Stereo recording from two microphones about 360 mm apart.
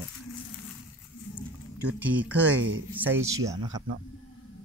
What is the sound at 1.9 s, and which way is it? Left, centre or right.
Speech, centre.